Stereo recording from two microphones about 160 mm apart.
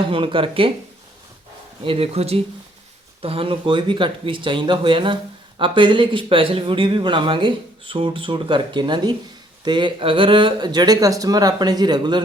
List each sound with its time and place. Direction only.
0.1 s speech: 30° right (ahead or behind)
1.8 s speech: 35° right (ahead or behind)